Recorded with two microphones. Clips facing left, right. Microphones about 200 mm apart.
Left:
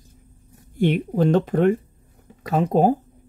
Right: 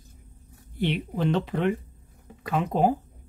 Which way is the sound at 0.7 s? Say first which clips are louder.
Left 7 dB; 45° left (ahead or behind).